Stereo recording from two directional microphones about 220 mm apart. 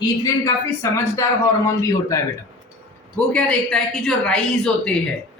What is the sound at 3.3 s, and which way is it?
Speech, 5° left (ahead or behind).